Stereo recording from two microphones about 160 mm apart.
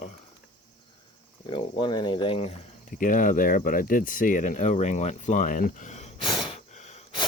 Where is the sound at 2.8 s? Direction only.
55° left (ahead or behind).